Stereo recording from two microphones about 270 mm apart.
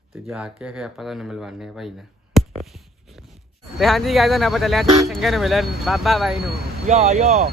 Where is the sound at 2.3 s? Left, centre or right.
Centre.